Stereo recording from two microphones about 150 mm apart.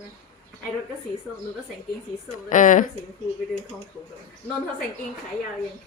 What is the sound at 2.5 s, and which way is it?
Speech, 60° left (ahead or behind).